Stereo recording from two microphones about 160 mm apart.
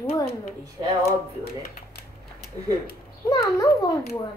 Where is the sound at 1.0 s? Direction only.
75° left (ahead or behind).